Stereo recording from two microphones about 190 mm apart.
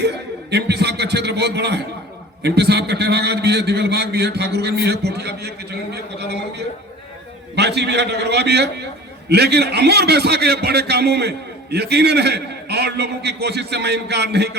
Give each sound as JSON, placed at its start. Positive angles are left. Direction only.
{"t": 0.0, "sound": "a sound", "side_deg": -60}
{"t": 2.4, "sound": "a man's voice", "side_deg": -60}
{"t": 7.5, "sound": "a man's voice", "side_deg": -60}